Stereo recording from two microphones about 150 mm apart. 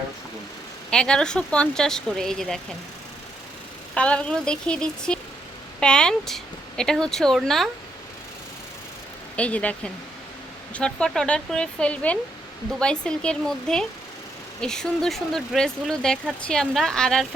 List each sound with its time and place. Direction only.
0.9 s speech: 5° left (ahead or behind)
3.9 s a woman's voice: 5° left (ahead or behind)
9.3 s a woman's voice: 10° left (ahead or behind)